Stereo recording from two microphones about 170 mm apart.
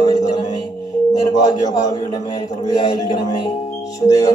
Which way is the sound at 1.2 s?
25° left (ahead or behind).